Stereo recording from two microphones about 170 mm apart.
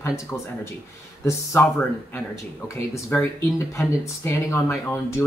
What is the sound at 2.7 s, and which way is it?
Speech, 15° left (ahead or behind).